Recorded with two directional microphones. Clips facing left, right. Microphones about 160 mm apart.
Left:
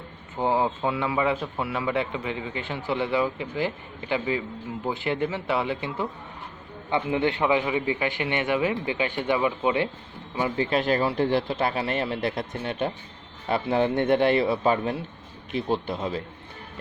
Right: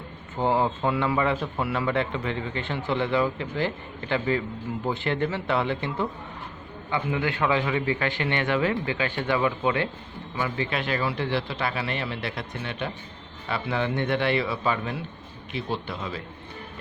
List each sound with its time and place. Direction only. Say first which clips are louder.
0.3 s a man's voice: even; 10° left (ahead or behind)
6.9 s a man's voice: left 3 dB; 25° left (ahead or behind)
10.3 s speech: left 4 dB; 35° left (ahead or behind)